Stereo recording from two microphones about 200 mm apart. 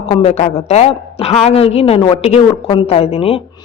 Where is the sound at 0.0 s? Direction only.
30° left (ahead or behind).